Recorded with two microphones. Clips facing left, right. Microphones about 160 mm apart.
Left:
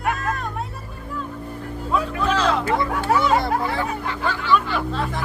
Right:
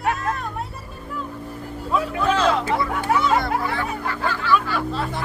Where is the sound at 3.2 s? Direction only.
25° left (ahead or behind).